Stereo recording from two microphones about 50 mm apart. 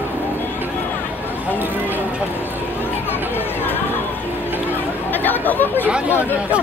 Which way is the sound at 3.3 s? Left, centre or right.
Left.